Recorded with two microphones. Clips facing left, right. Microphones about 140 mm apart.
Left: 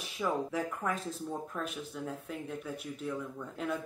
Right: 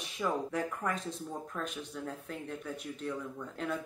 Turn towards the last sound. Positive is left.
turn(degrees=5)  # may be behind; listen again after turning